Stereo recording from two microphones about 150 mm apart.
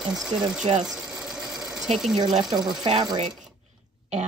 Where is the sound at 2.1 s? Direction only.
30° right (ahead or behind).